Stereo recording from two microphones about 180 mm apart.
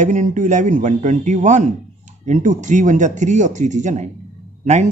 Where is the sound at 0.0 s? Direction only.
45° right (ahead or behind).